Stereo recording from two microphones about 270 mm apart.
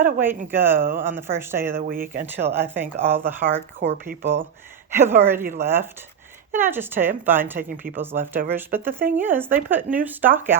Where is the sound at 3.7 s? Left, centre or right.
Right.